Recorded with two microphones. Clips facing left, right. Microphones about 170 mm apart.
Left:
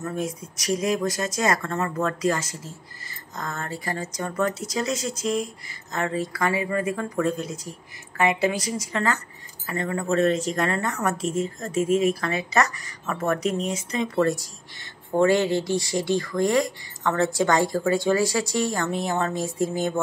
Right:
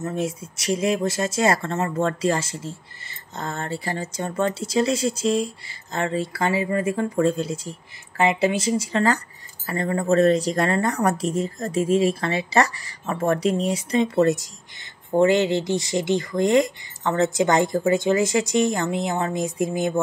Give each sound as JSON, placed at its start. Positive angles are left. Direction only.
{"t": 0.0, "sound": "a woman's voice", "side_deg": -25}